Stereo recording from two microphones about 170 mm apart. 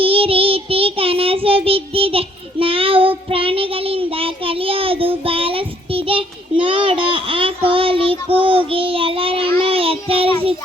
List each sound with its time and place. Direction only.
0.0 s child singing: 35° right (ahead or behind)